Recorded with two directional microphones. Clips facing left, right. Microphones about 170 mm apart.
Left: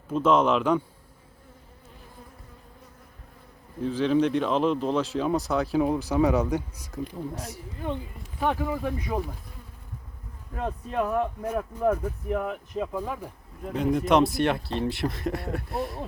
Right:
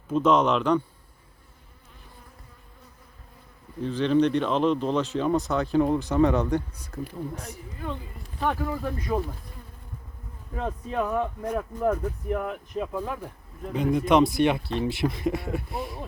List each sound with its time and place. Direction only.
0.1 s speech: 5° left (ahead or behind)
3.8 s speech: 5° left (ahead or behind)
7.3 s speech: 35° left (ahead or behind)
7.8 s speech: 20° left (ahead or behind)
8.4 s speech: 5° left (ahead or behind)
10.5 s speech: 5° left (ahead or behind)
13.0 s speech: 10° left (ahead or behind)